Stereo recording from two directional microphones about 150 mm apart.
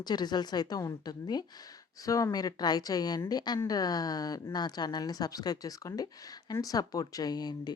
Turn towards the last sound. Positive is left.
turn(degrees=25)  # may be behind; listen again after turning